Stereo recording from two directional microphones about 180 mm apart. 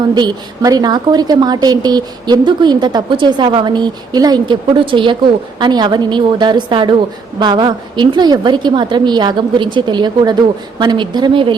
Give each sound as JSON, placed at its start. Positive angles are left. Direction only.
{"t": 0.1, "sound": "a woman's voice", "side_deg": -25}